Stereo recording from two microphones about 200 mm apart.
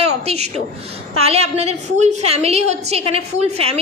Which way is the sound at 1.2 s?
30° right (ahead or behind).